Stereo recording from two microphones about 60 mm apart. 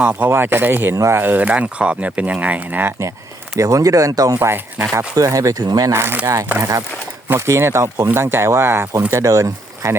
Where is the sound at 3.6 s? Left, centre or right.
Right.